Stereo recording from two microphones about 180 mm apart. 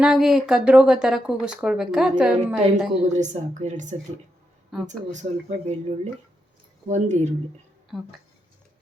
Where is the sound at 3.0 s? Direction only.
40° right (ahead or behind).